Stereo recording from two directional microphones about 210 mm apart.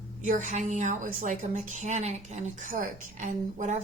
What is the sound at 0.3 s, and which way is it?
A woman's voice, 35° right (ahead or behind).